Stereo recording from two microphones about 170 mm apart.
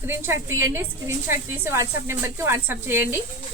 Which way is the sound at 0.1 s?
15° right (ahead or behind).